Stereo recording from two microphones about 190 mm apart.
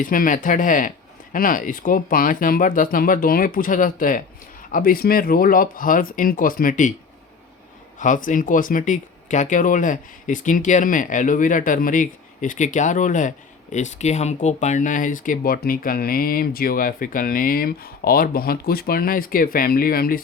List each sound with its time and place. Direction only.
0.0 s speech: 45° left (ahead or behind)
7.9 s speech: 40° left (ahead or behind)